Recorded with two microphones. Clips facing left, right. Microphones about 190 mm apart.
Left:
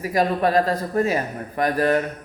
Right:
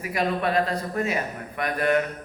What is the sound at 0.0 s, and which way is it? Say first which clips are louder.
A man's voice: left 5 dB; 40° left (ahead or behind).